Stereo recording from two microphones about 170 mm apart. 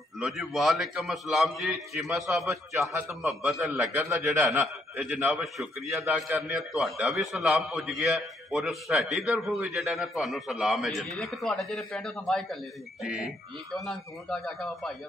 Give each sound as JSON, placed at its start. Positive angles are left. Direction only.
{"t": 0.2, "sound": "a man's voice", "side_deg": 0}
{"t": 2.9, "sound": "a man's voice", "side_deg": -15}
{"t": 3.2, "sound": "a man's voice", "side_deg": 0}
{"t": 5.8, "sound": "a man's voice", "side_deg": -15}
{"t": 6.1, "sound": "a man's voice", "side_deg": -5}